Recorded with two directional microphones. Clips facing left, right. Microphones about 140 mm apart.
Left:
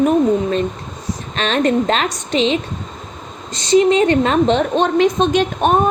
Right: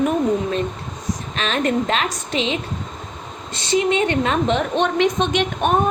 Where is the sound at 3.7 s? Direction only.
35° left (ahead or behind).